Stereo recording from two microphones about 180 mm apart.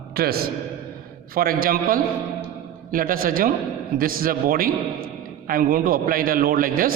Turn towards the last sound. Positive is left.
turn(degrees=-55)  # may be behind; listen again after turning